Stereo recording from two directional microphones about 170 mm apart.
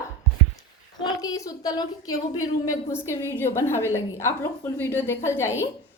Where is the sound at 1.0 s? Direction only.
20° left (ahead or behind).